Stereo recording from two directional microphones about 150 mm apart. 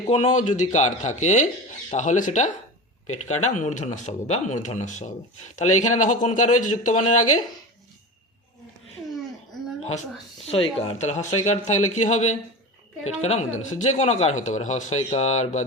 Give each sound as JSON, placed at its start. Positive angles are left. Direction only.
{"t": 0.2, "sound": "speech", "side_deg": 55}
{"t": 10.5, "sound": "speech", "side_deg": 40}